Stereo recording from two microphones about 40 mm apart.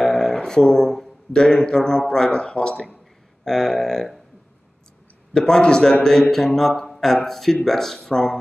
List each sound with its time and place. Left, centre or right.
0.0 s a sound: centre
1.3 s speech: centre
3.4 s speech: centre
5.3 s speech: centre
6.3 s speech: centre